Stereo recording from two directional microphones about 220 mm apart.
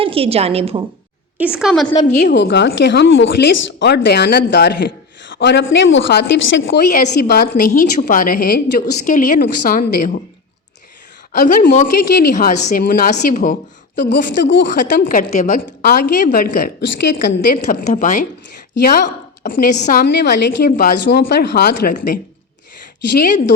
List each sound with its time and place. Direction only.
0.0 s a woman's voice: 25° right (ahead or behind)
1.4 s a woman's voice: 5° right (ahead or behind)
2.0 s a woman's voice: 50° left (ahead or behind)
11.3 s a woman's voice: 35° left (ahead or behind)
13.9 s a woman's voice: 50° left (ahead or behind)
17.5 s a woman's voice: 35° left (ahead or behind)